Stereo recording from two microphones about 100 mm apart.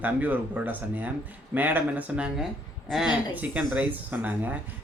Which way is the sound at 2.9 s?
5° right (ahead or behind).